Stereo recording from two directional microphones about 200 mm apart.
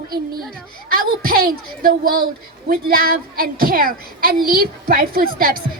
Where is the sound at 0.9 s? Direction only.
45° right (ahead or behind).